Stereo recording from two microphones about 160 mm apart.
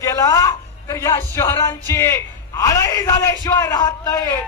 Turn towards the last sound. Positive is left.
turn(degrees=25)  # may be behind; listen again after turning